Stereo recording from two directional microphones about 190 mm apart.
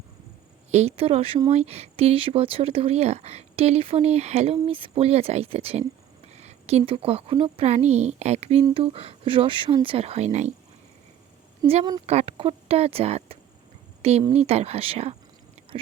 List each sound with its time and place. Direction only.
0.7 s a woman's voice: 35° right (ahead or behind)
11.6 s speech: 20° right (ahead or behind)
12.0 s speech: 30° right (ahead or behind)
15.7 s a sound: 30° right (ahead or behind)